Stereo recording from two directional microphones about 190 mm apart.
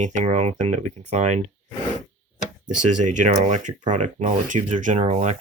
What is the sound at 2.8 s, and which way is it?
Speech, 40° right (ahead or behind).